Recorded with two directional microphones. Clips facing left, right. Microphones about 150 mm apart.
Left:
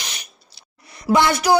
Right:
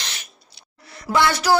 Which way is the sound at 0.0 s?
15° left (ahead or behind).